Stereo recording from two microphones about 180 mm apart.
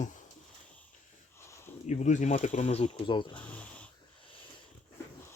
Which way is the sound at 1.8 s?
40° left (ahead or behind).